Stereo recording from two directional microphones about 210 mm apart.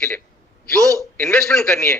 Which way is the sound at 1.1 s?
5° left (ahead or behind).